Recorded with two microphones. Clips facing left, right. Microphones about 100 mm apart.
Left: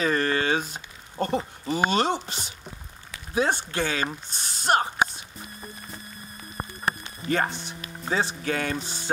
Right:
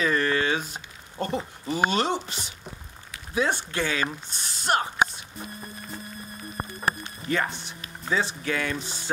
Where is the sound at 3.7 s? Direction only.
35° left (ahead or behind).